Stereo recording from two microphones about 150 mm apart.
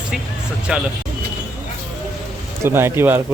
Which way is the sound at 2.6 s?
15° right (ahead or behind).